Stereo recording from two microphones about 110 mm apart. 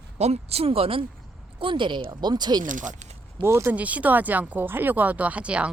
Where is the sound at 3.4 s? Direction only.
25° right (ahead or behind).